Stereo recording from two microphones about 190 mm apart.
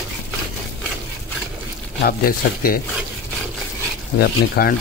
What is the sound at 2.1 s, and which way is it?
Speech, 50° left (ahead or behind).